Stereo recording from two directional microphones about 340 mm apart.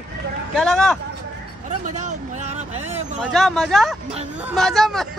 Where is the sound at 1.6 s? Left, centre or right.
Right.